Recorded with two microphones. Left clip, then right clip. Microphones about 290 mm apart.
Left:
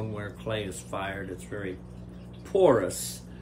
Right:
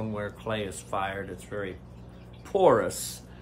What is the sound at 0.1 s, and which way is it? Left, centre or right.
Speech, centre.